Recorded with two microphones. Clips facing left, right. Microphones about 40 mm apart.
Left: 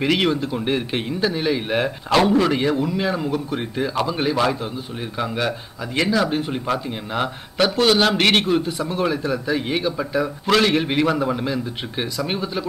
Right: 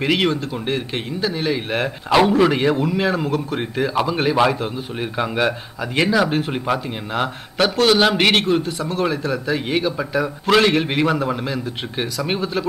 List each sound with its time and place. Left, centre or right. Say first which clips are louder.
0.0 s speech: even; centre
2.2 s a man's voice: right 2 dB; centre
8.6 s speech: right 1 dB; centre
9.0 s a man's voice: right 1 dB; centre